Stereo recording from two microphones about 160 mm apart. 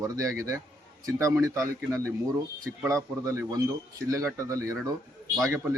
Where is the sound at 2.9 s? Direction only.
20° right (ahead or behind).